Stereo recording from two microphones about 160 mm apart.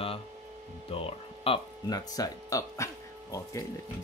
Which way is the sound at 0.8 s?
35° left (ahead or behind).